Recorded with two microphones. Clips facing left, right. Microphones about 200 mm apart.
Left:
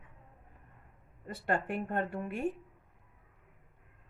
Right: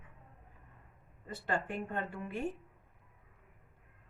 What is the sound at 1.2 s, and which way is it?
Speech, 50° left (ahead or behind).